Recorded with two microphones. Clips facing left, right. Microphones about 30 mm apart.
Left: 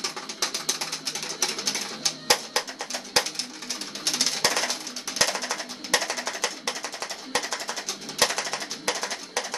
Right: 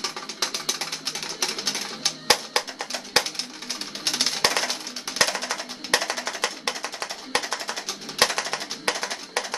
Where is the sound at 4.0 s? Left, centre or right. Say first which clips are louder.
Right 2 dB; right.